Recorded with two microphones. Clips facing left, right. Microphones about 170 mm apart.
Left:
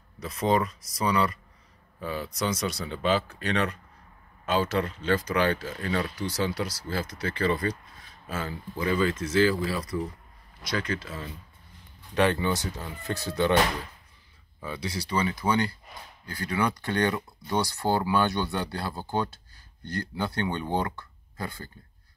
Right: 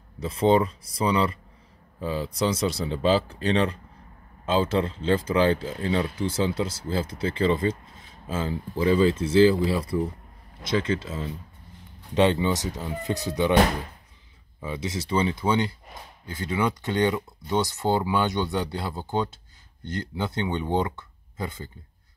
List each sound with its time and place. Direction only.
0.2 s speech: 30° right (ahead or behind)
14.6 s speech: 20° right (ahead or behind)